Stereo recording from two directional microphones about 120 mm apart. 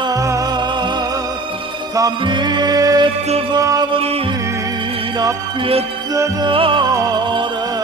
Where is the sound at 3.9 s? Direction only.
55° right (ahead or behind).